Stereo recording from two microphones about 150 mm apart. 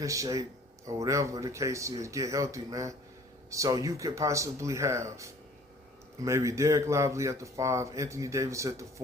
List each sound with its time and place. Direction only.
0.0 s speech: 20° right (ahead or behind)